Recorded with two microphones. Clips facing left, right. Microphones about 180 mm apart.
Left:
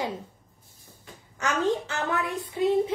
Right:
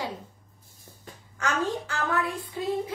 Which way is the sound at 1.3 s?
20° left (ahead or behind).